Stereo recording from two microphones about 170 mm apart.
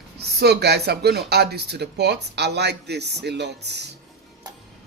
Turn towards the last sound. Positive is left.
turn(degrees=-80)